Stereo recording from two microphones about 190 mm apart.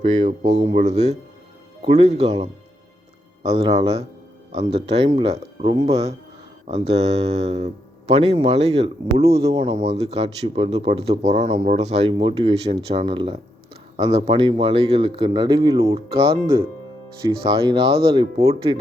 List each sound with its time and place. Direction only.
0.0 s speech: 35° right (ahead or behind); by 16.0 s 15° right (ahead or behind)
16.2 s speech: 30° right (ahead or behind)